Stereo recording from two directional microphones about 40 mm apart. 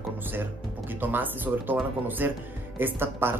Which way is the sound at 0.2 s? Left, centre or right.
Right.